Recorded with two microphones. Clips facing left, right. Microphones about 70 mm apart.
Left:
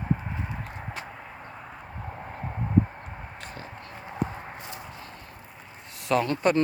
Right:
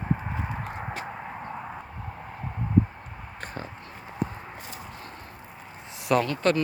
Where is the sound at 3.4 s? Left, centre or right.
Right.